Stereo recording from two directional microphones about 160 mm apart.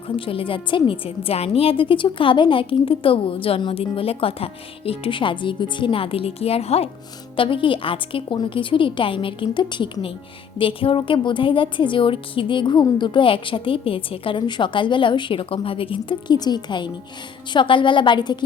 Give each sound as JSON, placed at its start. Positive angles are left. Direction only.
{"t": 0.3, "sound": "a woman's voice", "side_deg": 35}